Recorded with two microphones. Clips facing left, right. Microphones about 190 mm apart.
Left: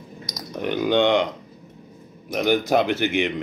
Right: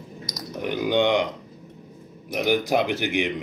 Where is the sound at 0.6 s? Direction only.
10° right (ahead or behind).